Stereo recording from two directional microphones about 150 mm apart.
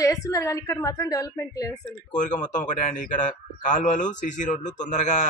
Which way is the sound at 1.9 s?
55° left (ahead or behind).